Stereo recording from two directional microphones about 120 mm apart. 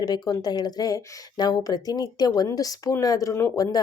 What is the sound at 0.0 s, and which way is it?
Speech, 35° left (ahead or behind).